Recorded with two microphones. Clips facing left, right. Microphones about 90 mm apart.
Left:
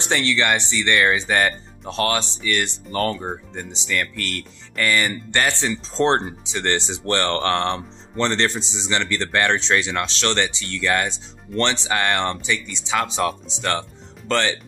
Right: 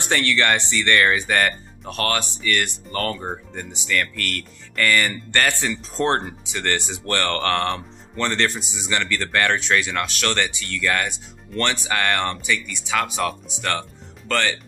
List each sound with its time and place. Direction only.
0.0 s speech: 20° left (ahead or behind)
3.2 s speech: centre (ahead or behind)
3.7 s speech: 20° left (ahead or behind)